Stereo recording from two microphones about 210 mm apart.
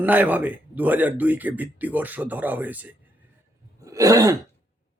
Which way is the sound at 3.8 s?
15° right (ahead or behind).